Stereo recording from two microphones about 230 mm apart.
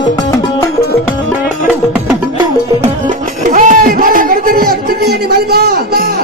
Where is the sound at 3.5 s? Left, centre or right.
Right.